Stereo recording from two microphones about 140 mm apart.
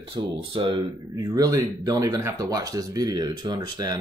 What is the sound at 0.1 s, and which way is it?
Speech, 40° right (ahead or behind).